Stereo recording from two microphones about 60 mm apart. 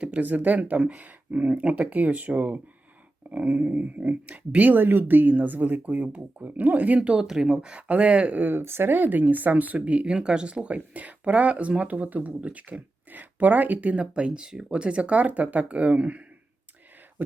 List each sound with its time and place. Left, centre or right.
0.0 s speech: right
7.2 s speech: centre; by 17.3 s right